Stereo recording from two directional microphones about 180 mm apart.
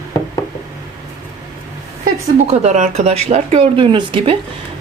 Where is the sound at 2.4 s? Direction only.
40° right (ahead or behind).